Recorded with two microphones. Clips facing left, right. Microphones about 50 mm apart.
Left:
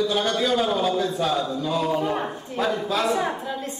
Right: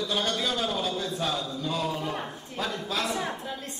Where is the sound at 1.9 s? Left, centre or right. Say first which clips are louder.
Left 8 dB; centre.